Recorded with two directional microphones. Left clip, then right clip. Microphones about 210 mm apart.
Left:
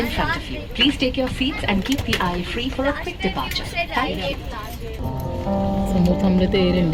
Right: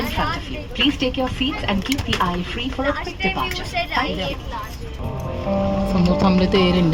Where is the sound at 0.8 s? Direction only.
Centre (ahead or behind).